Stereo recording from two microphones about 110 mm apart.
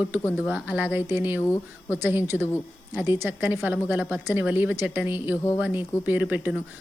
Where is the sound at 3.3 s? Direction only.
20° right (ahead or behind).